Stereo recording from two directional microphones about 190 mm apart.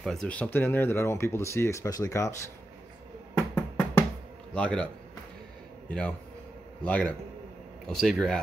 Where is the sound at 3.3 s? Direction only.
5° left (ahead or behind).